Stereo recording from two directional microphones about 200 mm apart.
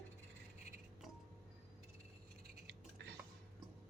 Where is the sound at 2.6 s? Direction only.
55° right (ahead or behind).